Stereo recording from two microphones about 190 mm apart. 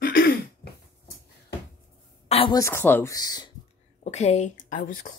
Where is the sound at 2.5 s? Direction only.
15° left (ahead or behind).